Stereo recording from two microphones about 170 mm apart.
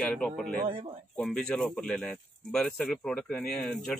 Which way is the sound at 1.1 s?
5° left (ahead or behind).